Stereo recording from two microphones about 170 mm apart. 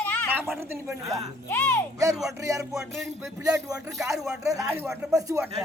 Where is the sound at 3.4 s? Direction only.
20° right (ahead or behind).